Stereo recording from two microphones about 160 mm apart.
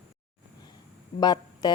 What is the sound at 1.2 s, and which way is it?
Speech, 25° left (ahead or behind).